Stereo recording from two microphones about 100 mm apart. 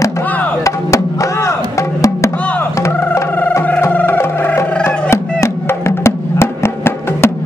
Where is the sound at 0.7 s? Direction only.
30° left (ahead or behind).